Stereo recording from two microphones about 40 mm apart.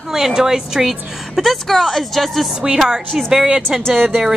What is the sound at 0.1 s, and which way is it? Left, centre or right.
A woman's voice, centre.